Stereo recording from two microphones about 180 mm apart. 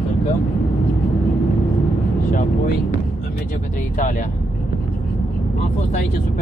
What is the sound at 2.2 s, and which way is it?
Speech, 50° left (ahead or behind).